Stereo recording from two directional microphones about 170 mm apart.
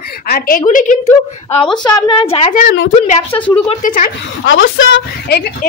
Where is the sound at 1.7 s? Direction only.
25° left (ahead or behind).